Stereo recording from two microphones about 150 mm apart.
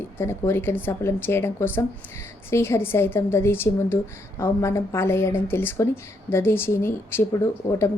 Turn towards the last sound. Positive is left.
turn(degrees=20)  # may be behind; listen again after turning